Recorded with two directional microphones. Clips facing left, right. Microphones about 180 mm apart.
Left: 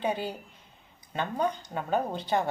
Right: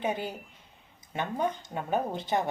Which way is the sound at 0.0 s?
20° right (ahead or behind).